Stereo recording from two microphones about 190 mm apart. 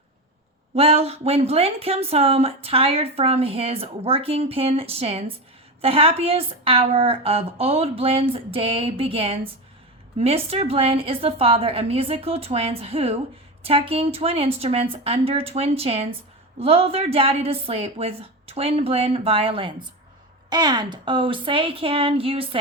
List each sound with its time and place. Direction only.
0.8 s a woman's voice: 30° right (ahead or behind)